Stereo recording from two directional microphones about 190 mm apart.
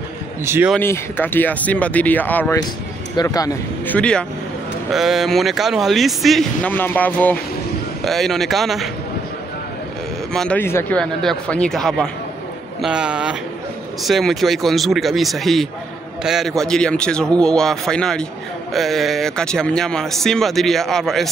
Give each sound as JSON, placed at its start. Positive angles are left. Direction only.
{"t": 0.5, "sound": "speech", "side_deg": -10}
{"t": 0.7, "sound": "speech", "side_deg": 10}
{"t": 10.3, "sound": "speech", "side_deg": 5}